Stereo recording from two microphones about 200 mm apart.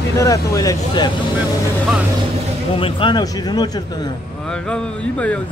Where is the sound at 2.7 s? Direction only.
25° left (ahead or behind).